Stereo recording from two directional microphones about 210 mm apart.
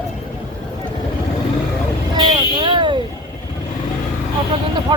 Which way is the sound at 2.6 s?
25° right (ahead or behind).